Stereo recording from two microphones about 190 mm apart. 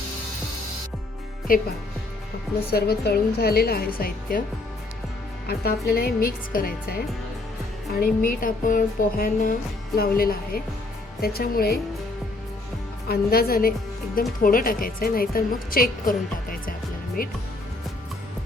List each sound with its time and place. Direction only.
1.5 s a woman's voice: 50° left (ahead or behind)
2.6 s a woman's voice: 55° left (ahead or behind)
5.5 s a woman's voice: 55° left (ahead or behind)
13.1 s a woman's voice: 50° left (ahead or behind)